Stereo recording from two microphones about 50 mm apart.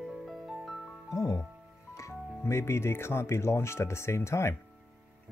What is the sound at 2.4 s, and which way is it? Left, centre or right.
Speech, left.